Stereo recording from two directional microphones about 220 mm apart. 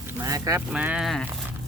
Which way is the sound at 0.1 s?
15° right (ahead or behind).